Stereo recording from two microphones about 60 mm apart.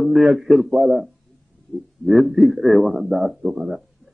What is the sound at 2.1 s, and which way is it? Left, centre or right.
A man's voice, centre.